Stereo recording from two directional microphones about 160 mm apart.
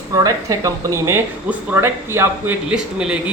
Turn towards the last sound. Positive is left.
turn(degrees=-5)  # may be behind; listen again after turning